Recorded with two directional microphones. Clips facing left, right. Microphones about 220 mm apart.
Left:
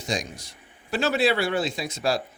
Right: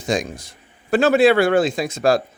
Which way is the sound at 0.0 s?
50° right (ahead or behind).